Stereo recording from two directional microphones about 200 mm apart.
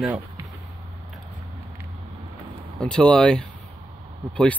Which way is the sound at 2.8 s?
5° left (ahead or behind).